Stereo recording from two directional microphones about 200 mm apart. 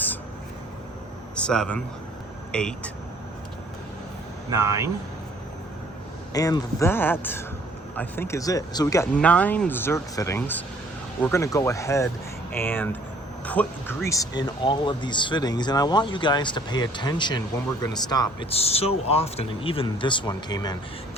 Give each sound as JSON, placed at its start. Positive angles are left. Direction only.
{"t": 1.4, "sound": "speech", "side_deg": 5}
{"t": 4.6, "sound": "speech", "side_deg": -15}
{"t": 6.3, "sound": "speech", "side_deg": 20}
{"t": 9.1, "sound": "speech", "side_deg": 5}